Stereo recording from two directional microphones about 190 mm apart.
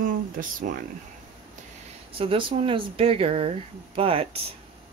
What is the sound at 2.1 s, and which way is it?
Speech, 30° right (ahead or behind).